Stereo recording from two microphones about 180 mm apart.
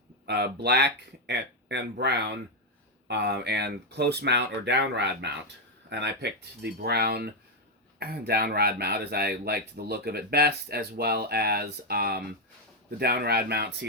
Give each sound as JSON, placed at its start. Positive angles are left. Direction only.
{"t": 0.3, "sound": "speech", "side_deg": -65}